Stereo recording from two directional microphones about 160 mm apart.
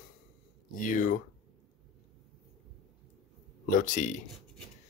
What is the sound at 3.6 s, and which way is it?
Speech, 55° left (ahead or behind).